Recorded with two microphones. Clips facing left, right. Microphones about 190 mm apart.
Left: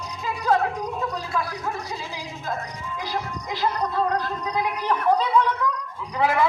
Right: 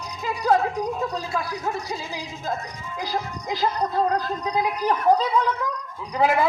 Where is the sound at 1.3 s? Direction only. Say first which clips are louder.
Even; 25° right (ahead or behind).